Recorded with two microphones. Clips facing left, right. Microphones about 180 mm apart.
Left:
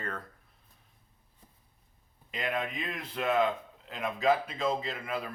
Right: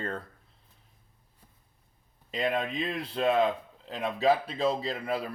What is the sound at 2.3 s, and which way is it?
Speech, 35° right (ahead or behind).